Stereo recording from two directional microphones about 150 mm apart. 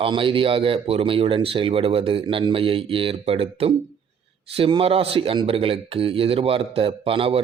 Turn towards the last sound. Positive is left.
turn(degrees=-40)  # may be behind; listen again after turning